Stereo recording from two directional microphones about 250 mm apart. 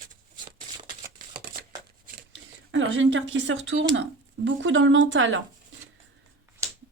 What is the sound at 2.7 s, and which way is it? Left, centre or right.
A woman's voice, right.